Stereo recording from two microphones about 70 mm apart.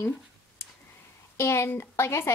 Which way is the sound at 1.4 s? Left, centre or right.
Left.